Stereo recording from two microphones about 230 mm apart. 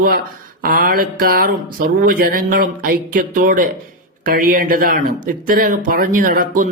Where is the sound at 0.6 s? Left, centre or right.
Right.